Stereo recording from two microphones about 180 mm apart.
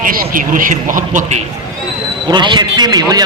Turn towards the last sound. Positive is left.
turn(degrees=-20)  # may be behind; listen again after turning